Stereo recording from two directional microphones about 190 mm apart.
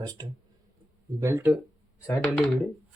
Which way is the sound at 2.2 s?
Centre (ahead or behind).